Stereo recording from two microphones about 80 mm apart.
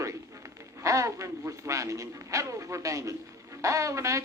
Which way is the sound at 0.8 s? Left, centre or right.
Right.